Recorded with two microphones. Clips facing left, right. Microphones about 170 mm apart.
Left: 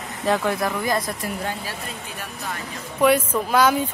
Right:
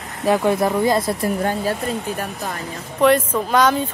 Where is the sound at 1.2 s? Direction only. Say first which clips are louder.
Right 8 dB; 45° right (ahead or behind).